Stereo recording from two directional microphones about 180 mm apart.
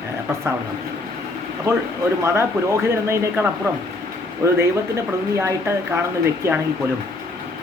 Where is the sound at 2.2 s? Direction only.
15° right (ahead or behind).